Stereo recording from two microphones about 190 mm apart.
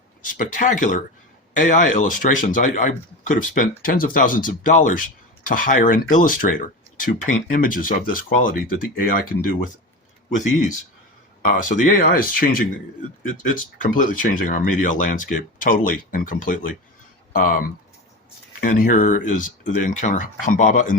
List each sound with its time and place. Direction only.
0.2 s speech: 45° left (ahead or behind)
11.4 s speech: 40° left (ahead or behind)